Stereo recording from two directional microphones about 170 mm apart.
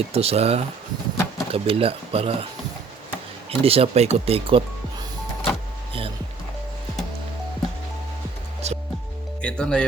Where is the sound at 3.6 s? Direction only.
35° right (ahead or behind).